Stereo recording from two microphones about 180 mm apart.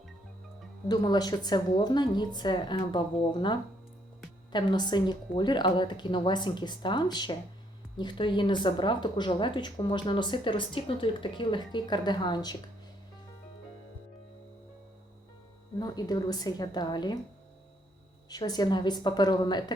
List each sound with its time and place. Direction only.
0.9 s speech: 25° left (ahead or behind)
15.8 s speech: 20° left (ahead or behind)
18.3 s speech: 20° left (ahead or behind)